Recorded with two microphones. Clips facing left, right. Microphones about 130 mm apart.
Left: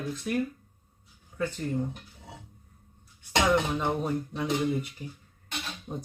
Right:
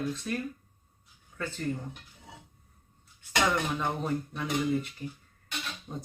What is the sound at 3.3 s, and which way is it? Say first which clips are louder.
Speech: left 3 dB; 20° left (ahead or behind).